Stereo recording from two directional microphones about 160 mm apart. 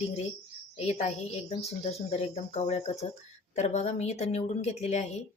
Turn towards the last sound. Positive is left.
turn(degrees=45)  # may be behind; listen again after turning